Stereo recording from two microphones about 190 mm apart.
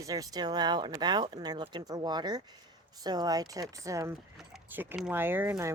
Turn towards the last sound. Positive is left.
turn(degrees=-10)  # may be behind; listen again after turning